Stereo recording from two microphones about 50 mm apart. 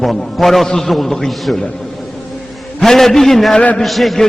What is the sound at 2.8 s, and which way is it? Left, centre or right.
A man's voice, centre.